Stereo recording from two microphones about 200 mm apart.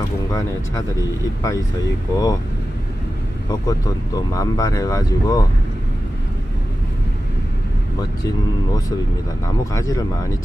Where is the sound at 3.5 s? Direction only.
20° left (ahead or behind).